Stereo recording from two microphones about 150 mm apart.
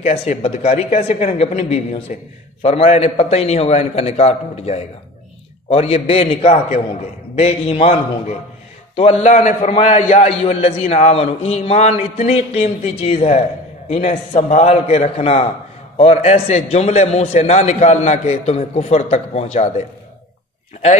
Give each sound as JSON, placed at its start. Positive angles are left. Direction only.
{"t": 0.0, "sound": "a man's voice", "side_deg": 45}